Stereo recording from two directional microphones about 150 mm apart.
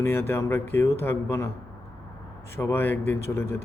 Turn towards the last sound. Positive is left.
turn(degrees=15)  # may be behind; listen again after turning